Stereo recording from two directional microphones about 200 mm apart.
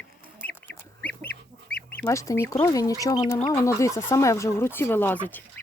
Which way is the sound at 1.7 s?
5° left (ahead or behind).